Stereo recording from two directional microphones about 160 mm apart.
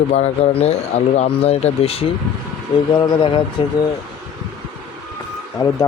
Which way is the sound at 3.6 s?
30° left (ahead or behind).